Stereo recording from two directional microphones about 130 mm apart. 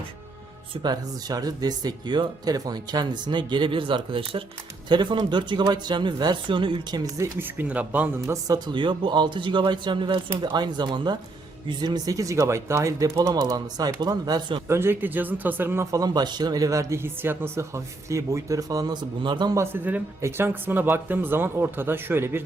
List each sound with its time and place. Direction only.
0.7 s speech: 35° right (ahead or behind)
7.3 s speech: 15° right (ahead or behind)
8.3 s speech: 30° right (ahead or behind)
14.7 s speech: 20° right (ahead or behind); by 19.5 s 35° right (ahead or behind)
19.5 s speech: 15° right (ahead or behind)